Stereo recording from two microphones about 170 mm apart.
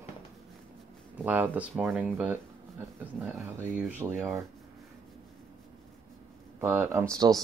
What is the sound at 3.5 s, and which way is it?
Speech, 10° right (ahead or behind).